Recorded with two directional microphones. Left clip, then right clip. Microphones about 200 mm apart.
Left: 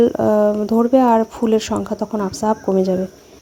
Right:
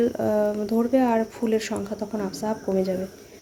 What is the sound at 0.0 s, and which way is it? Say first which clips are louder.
Speech: left 8 dB; 35° left (ahead or behind).